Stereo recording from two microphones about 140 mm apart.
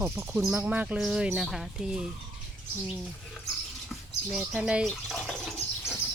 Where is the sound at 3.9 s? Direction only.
Centre (ahead or behind).